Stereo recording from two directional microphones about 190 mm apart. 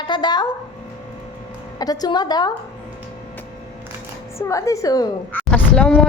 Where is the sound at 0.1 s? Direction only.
25° left (ahead or behind).